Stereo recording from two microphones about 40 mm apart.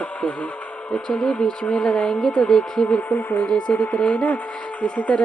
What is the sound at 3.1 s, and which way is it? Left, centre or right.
Speech, left.